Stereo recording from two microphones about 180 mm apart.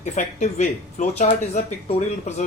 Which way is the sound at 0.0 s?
40° left (ahead or behind).